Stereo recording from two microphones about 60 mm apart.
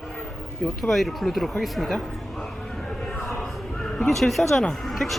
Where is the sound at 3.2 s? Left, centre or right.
Centre.